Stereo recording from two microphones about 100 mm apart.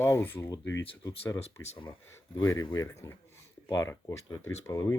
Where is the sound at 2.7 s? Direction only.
30° left (ahead or behind).